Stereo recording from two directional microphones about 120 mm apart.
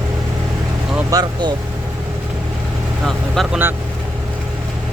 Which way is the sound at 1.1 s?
30° right (ahead or behind).